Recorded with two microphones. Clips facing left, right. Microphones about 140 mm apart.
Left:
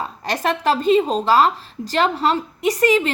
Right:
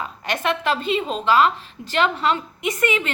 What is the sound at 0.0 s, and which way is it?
Speech, 35° left (ahead or behind).